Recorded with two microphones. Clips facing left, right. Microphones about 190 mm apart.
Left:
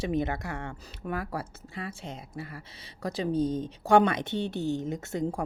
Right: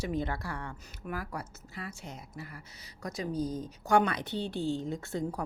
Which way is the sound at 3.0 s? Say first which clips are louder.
Left 6 dB; 30° left (ahead or behind).